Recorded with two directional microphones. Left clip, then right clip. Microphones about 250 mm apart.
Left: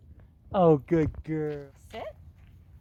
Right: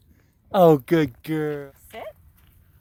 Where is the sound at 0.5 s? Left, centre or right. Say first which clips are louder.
Right 6 dB; right.